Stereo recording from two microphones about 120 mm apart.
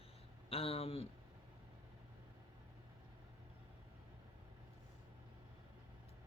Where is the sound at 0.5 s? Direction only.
55° left (ahead or behind).